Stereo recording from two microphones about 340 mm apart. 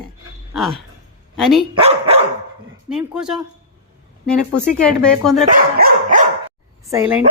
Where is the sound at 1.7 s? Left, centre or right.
Centre.